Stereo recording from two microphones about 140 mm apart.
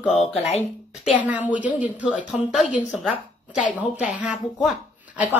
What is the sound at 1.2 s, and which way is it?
A woman's voice, 10° right (ahead or behind).